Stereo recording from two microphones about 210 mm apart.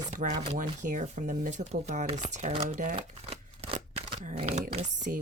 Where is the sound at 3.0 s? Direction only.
30° right (ahead or behind).